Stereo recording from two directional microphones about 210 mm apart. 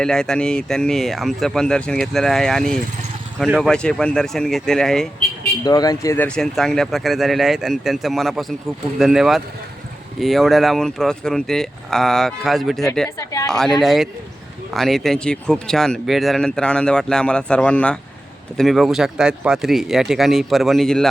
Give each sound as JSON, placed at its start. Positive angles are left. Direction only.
{"t": 0.0, "sound": "speech", "side_deg": 5}
{"t": 5.6, "sound": "speech", "side_deg": 20}
{"t": 13.1, "sound": "speech", "side_deg": 15}
{"t": 13.5, "sound": "speech", "side_deg": 0}